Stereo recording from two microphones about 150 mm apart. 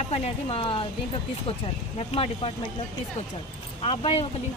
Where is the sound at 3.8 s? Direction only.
35° left (ahead or behind).